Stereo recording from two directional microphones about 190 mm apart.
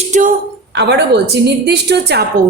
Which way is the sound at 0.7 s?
60° right (ahead or behind).